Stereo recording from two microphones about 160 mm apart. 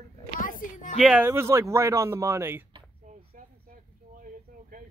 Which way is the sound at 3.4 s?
60° right (ahead or behind).